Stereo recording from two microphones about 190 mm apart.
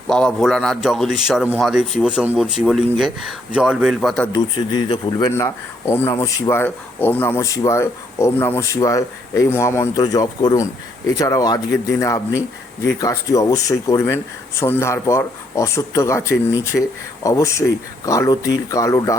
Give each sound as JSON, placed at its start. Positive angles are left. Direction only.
{"t": 0.1, "sound": "a man's voice", "side_deg": 5}
{"t": 4.4, "sound": "speech", "side_deg": 20}